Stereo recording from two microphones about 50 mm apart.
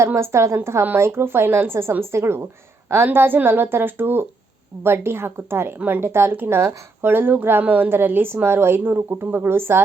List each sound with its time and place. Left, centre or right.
0.2 s speech: right
2.9 s a woman's voice: right
9.0 s a woman's voice: right